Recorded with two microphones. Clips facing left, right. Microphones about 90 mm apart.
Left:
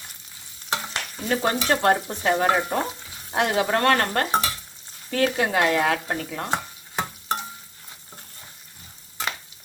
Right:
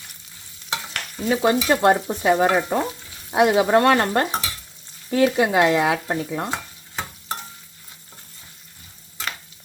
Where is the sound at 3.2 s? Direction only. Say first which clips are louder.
Right 5 dB; 15° right (ahead or behind).